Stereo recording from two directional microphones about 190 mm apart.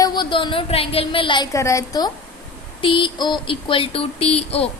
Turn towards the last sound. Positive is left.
turn(degrees=30)  # may be behind; listen again after turning